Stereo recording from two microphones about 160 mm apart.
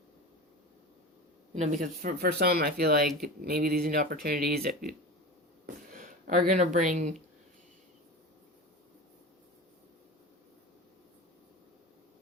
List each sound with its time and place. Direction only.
1.5 s speech: 45° right (ahead or behind)
2.0 s speech: 70° right (ahead or behind)
5.6 s a sound: 55° right (ahead or behind)
6.5 s speech: 50° right (ahead or behind)